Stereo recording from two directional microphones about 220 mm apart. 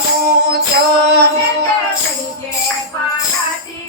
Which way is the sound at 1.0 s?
50° right (ahead or behind).